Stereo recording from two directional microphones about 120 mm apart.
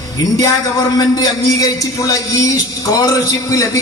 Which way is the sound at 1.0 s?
35° left (ahead or behind).